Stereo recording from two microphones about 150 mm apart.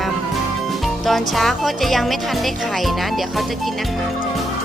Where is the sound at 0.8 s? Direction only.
Centre (ahead or behind).